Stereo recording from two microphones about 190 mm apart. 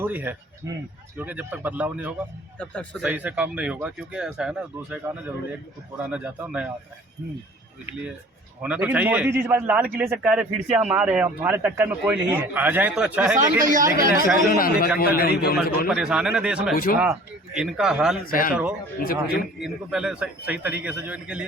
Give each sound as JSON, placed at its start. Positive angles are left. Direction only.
{"t": 0.0, "sound": "a man's voice", "side_deg": -10}
{"t": 2.6, "sound": "a man's voice", "side_deg": 5}
{"t": 3.0, "sound": "a man's voice", "side_deg": -10}
{"t": 8.6, "sound": "a man's voice", "side_deg": -5}
{"t": 13.6, "sound": "speech", "side_deg": -45}
{"t": 14.4, "sound": "a man's voice", "side_deg": 50}
{"t": 15.9, "sound": "a man's voice", "side_deg": -5}
{"t": 16.7, "sound": "a man's voice", "side_deg": 50}
{"t": 17.0, "sound": "a man's voice", "side_deg": -5}
{"t": 18.3, "sound": "a man's voice", "side_deg": 50}
{"t": 19.5, "sound": "a man's voice", "side_deg": -5}